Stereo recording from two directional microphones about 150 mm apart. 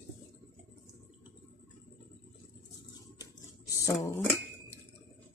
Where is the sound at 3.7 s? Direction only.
20° left (ahead or behind).